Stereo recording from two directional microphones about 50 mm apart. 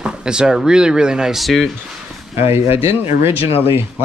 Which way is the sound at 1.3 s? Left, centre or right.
Centre.